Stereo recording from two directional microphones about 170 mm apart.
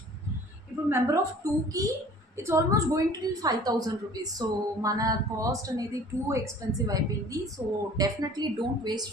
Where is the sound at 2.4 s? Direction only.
15° right (ahead or behind).